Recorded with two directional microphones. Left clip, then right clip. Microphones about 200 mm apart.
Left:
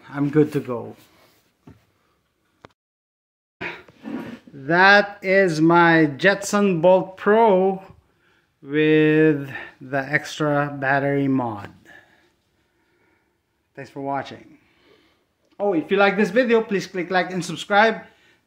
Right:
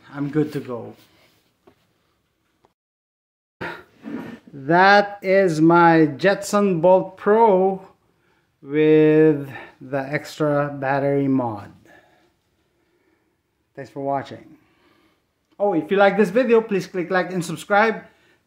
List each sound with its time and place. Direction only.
0.0 s speech: 35° left (ahead or behind)
3.5 s a sound: 20° right (ahead or behind)
4.6 s speech: 10° right (ahead or behind)
13.7 s a man's voice: 10° right (ahead or behind)